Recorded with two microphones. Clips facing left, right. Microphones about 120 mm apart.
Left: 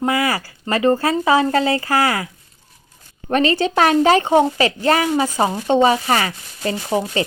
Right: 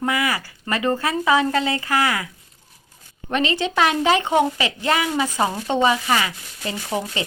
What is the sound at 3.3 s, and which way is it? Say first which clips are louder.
A woman's voice: left 5 dB; 40° left (ahead or behind).